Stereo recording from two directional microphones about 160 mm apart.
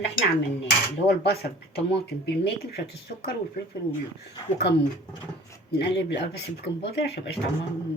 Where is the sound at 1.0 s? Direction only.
90° left.